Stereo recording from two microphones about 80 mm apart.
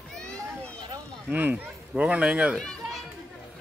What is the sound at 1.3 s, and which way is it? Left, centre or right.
Speech, right.